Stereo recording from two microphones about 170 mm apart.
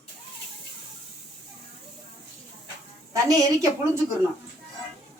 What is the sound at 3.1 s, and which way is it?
Speech, 20° right (ahead or behind).